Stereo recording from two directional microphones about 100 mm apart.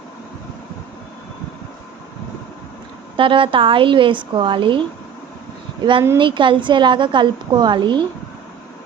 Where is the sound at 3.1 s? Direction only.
60° right (ahead or behind).